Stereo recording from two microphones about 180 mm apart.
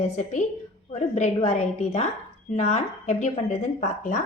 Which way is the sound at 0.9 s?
35° left (ahead or behind).